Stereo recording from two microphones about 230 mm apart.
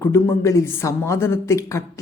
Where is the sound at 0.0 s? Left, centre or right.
Centre.